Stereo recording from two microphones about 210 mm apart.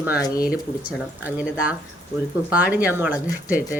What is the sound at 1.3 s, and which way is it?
Speech, 5° right (ahead or behind).